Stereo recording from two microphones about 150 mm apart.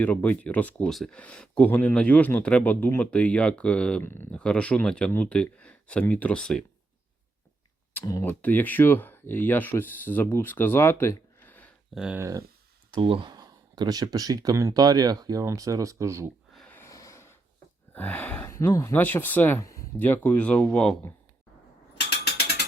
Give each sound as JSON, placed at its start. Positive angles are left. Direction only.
{"t": 0.0, "sound": "speech", "side_deg": 10}
{"t": 7.9, "sound": "speech", "side_deg": 15}
{"t": 11.9, "sound": "speech", "side_deg": -5}
{"t": 12.2, "sound": "speech", "side_deg": -20}
{"t": 12.9, "sound": "speech", "side_deg": -35}
{"t": 16.6, "sound": "snort", "side_deg": 10}
{"t": 17.9, "sound": "speech", "side_deg": 10}
{"t": 22.2, "sound": "ratchet", "side_deg": 90}